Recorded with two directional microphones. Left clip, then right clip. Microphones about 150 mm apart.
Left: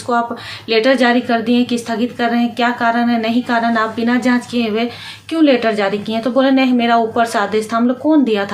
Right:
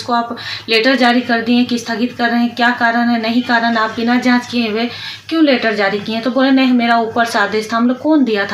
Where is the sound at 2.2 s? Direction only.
10° left (ahead or behind).